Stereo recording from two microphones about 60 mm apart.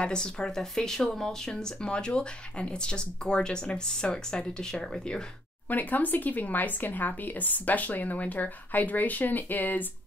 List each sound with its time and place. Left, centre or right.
0.0 s speech: centre
5.7 s speech: left